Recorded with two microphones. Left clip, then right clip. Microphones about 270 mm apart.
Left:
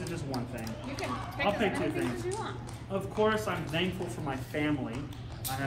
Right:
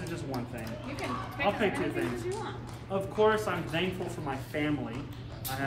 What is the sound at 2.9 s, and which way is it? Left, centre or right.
Speech, centre.